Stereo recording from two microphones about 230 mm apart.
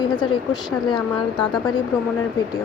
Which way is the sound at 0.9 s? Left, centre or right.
Centre.